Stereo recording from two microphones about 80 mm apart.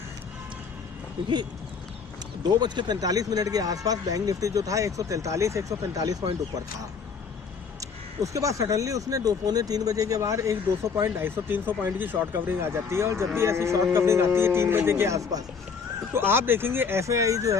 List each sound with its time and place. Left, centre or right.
2.4 s speech: right
7.8 s speech: right
16.1 s speech: right